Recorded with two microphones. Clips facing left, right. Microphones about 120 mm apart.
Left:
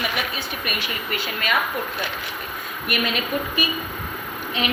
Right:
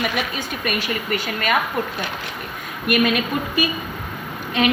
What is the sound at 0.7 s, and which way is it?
Speech, 40° right (ahead or behind).